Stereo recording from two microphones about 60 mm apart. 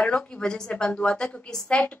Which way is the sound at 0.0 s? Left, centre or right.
Centre.